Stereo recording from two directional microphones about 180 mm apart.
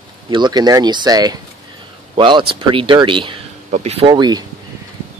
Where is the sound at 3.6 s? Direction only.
40° right (ahead or behind); by 4.4 s 25° right (ahead or behind).